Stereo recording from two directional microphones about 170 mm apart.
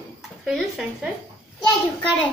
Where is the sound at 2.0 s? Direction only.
30° left (ahead or behind).